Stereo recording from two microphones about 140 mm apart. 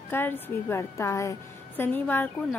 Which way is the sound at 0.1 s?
15° left (ahead or behind).